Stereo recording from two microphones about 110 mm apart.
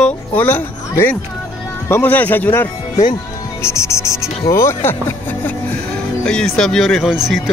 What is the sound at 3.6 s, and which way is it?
Cricket, 25° left (ahead or behind).